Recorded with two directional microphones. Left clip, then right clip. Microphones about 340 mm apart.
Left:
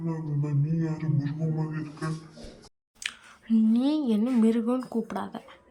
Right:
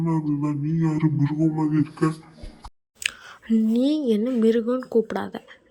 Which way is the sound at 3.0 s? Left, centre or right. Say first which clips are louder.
Right 7 dB; centre.